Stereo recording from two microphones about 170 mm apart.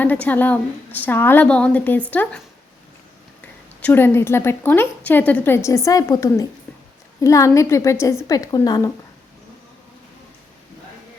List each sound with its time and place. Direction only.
0.0 s a woman's voice: 10° left (ahead or behind)
3.8 s a woman's voice: 10° left (ahead or behind)